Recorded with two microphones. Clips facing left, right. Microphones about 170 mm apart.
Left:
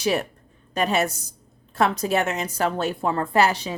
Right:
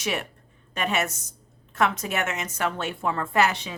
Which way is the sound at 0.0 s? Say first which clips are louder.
Left 6 dB; 35° left (ahead or behind).